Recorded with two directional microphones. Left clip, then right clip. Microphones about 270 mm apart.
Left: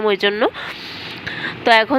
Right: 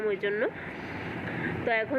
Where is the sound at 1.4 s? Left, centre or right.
Left.